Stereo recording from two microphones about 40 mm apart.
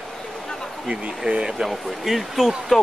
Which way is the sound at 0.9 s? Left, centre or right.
Right.